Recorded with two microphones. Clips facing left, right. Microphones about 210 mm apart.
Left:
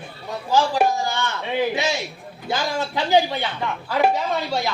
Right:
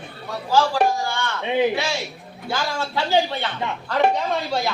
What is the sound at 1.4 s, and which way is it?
Speech, 20° right (ahead or behind).